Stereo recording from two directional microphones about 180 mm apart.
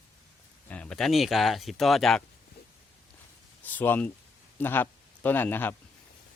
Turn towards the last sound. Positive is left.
turn(degrees=10)  # may be behind; listen again after turning